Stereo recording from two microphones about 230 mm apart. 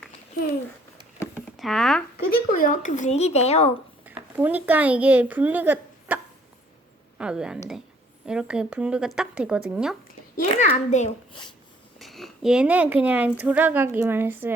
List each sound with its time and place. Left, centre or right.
1.4 s a sound: centre
2.1 s speech: left
4.0 s speech: centre
7.2 s a woman's voice: centre
10.3 s speech: left
11.9 s speech: centre